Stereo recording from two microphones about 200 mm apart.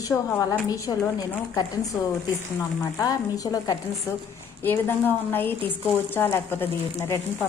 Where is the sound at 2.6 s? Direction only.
15° left (ahead or behind).